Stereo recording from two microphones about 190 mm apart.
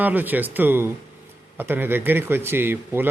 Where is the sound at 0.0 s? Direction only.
10° right (ahead or behind).